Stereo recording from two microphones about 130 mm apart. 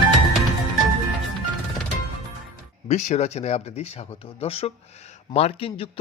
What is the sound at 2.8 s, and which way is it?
Speech, 60° left (ahead or behind).